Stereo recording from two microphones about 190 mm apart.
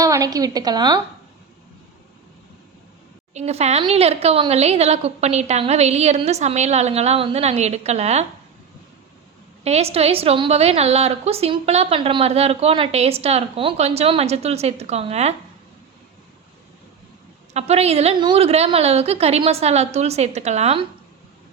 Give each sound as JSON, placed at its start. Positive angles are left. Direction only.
{"t": 0.0, "sound": "a woman's voice", "side_deg": -20}
{"t": 3.3, "sound": "a woman's voice", "side_deg": -35}
{"t": 9.6, "sound": "a woman's voice", "side_deg": -35}
{"t": 17.5, "sound": "a woman's voice", "side_deg": -35}